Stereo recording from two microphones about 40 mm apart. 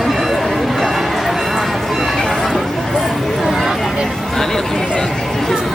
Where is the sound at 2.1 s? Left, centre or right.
Centre.